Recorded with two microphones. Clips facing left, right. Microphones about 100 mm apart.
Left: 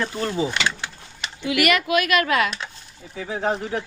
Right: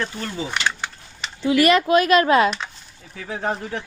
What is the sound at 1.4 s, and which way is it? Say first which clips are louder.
Speech: right 5 dB; 30° right (ahead or behind).